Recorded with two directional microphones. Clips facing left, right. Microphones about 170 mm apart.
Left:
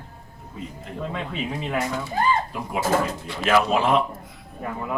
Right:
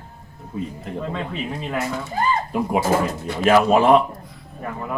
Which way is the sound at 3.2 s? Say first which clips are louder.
Right 8 dB; 45° right (ahead or behind).